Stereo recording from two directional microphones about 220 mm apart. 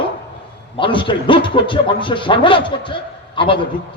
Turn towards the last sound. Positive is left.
turn(degrees=20)  # may be behind; listen again after turning